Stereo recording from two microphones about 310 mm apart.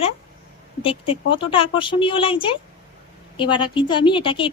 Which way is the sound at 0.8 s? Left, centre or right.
Centre.